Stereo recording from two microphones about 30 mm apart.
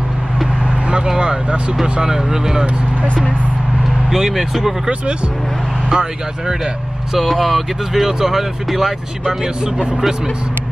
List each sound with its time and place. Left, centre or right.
0.7 s vehicle: right
1.2 s speech: right
2.0 s speech: centre
4.1 s speech: centre
5.9 s speech: right
7.2 s speech: centre
7.9 s speech: centre
9.4 s speech: centre